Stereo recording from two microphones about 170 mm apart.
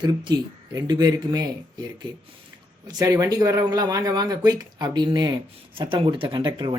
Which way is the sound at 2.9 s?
20° right (ahead or behind).